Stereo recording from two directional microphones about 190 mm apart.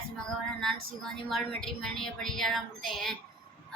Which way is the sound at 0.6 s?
5° left (ahead or behind).